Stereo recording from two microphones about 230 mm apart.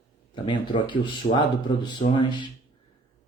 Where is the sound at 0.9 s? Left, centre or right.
Left.